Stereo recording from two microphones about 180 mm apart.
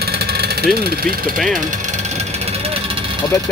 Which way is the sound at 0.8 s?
55° right (ahead or behind).